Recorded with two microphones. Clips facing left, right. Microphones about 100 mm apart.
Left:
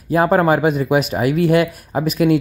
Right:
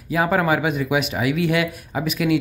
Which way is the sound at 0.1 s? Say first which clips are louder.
Left 5 dB; 40° left (ahead or behind).